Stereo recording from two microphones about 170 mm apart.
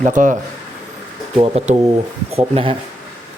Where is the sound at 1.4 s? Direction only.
35° right (ahead or behind).